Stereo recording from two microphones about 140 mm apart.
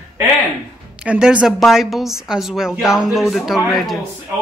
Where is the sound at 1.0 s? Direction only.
5° right (ahead or behind).